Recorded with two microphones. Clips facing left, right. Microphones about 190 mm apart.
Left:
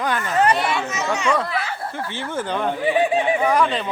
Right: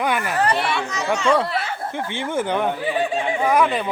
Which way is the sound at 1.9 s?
15° right (ahead or behind).